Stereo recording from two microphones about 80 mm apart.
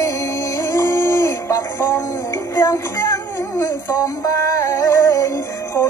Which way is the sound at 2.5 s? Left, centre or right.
Left.